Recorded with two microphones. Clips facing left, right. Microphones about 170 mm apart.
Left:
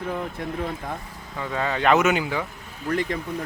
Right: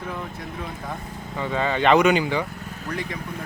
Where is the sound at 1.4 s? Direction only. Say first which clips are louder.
Right 2 dB; centre (ahead or behind).